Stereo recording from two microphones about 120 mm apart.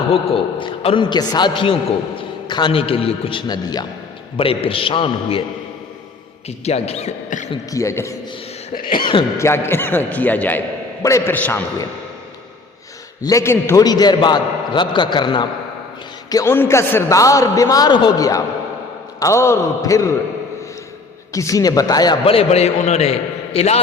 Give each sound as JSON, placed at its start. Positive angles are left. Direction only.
{"t": 0.1, "sound": "a man's voice", "side_deg": 50}
{"t": 1.0, "sound": "a man's voice", "side_deg": 35}
{"t": 4.4, "sound": "a man's voice", "side_deg": 50}
{"t": 6.7, "sound": "a man's voice", "side_deg": 60}
{"t": 7.7, "sound": "a man's voice", "side_deg": 25}
{"t": 9.4, "sound": "a man's voice", "side_deg": 20}
{"t": 13.2, "sound": "a man's voice", "side_deg": 25}
{"t": 13.7, "sound": "a man's voice", "side_deg": 35}
{"t": 16.3, "sound": "a man's voice", "side_deg": 25}
{"t": 21.3, "sound": "a man's voice", "side_deg": 30}
{"t": 22.2, "sound": "a man's voice", "side_deg": 50}